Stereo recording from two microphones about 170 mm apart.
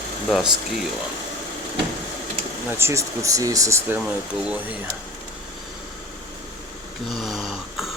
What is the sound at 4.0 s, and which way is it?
Speech, 5° right (ahead or behind).